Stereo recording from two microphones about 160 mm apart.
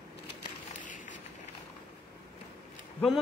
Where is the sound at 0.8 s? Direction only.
55° left (ahead or behind).